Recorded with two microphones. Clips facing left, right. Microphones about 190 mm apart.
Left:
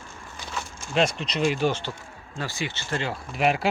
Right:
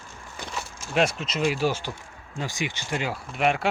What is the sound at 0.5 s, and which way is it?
Speech, 10° right (ahead or behind).